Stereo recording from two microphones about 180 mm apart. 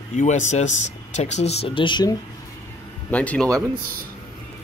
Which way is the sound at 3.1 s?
10° left (ahead or behind).